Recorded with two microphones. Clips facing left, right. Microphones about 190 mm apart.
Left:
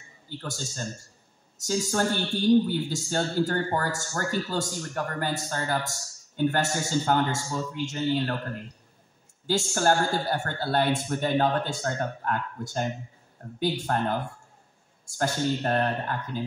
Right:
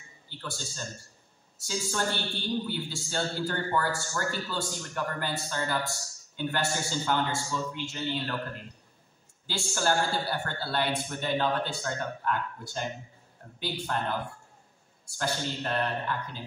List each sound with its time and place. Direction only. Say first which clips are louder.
0.4 s a man's voice: left 3 dB; 45° left (ahead or behind)
9.5 s a man's voice: left 5 dB; 45° left (ahead or behind)